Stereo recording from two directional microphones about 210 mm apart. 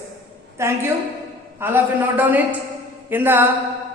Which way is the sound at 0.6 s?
15° right (ahead or behind).